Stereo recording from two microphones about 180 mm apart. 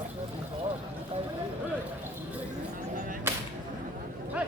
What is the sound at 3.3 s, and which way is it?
Whip, 10° right (ahead or behind).